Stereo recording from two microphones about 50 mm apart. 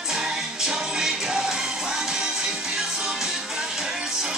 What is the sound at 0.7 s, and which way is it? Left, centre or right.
Music, centre.